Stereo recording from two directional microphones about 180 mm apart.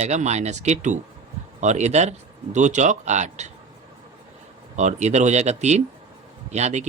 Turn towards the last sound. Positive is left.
turn(degrees=-40)  # may be behind; listen again after turning